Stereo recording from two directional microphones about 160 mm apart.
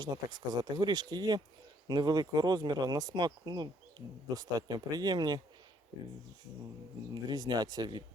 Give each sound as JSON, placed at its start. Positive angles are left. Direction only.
{"t": 0.0, "sound": "speech", "side_deg": -25}
{"t": 7.1, "sound": "speech", "side_deg": -25}